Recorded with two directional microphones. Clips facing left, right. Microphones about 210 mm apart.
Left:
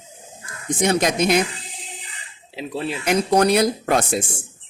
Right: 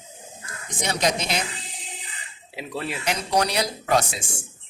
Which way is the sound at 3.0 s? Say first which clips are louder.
Left 8 dB; 55° left (ahead or behind).